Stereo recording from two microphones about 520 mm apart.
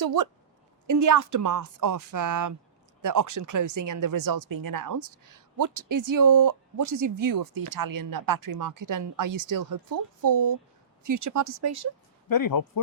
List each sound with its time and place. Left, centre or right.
0.0 s speech: right
12.3 s speech: left